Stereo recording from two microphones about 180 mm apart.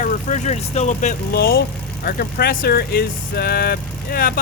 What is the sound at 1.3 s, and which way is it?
Speech, 55° left (ahead or behind).